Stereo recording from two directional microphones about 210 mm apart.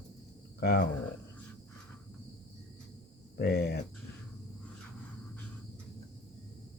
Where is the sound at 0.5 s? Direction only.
50° left (ahead or behind).